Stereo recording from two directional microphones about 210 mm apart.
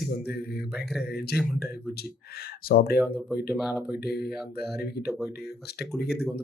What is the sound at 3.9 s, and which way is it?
Speech, 50° left (ahead or behind).